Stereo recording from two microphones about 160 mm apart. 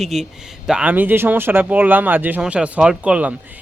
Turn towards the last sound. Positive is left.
turn(degrees=-10)  # may be behind; listen again after turning